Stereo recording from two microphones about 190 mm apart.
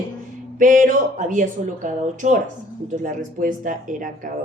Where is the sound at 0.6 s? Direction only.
45° right (ahead or behind).